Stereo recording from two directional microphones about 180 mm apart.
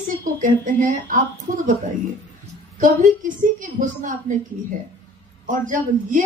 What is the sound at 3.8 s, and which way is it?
Speech, 40° right (ahead or behind).